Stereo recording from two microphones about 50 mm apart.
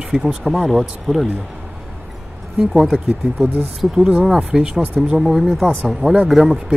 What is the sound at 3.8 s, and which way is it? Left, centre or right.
Speech, centre.